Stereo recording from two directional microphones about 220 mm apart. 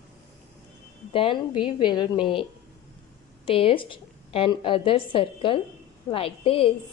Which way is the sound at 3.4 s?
25° left (ahead or behind).